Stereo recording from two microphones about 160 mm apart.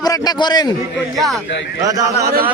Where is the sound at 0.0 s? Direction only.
25° left (ahead or behind).